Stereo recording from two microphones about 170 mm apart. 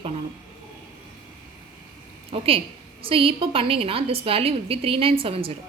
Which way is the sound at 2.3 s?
35° right (ahead or behind).